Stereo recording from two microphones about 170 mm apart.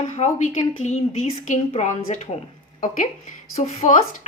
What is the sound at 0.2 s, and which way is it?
A woman's voice, 45° left (ahead or behind).